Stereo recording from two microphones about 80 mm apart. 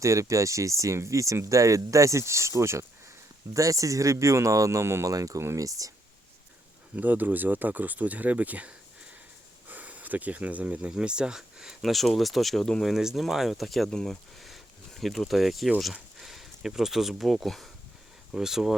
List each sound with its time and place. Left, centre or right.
0.0 s speech: right
6.9 s speech: right; by 18.8 s centre